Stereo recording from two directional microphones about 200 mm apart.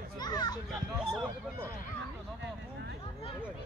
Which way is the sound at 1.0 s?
Centre (ahead or behind).